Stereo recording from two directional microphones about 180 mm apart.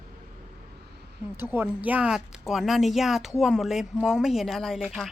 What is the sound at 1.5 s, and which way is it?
Speech, 10° right (ahead or behind).